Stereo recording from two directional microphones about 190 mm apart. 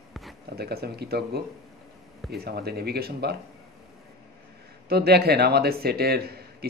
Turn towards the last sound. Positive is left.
turn(degrees=-55)  # may be behind; listen again after turning